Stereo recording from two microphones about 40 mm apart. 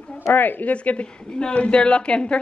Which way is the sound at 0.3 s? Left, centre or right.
Left.